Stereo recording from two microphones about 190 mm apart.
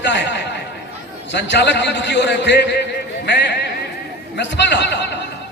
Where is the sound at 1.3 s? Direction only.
65° left (ahead or behind).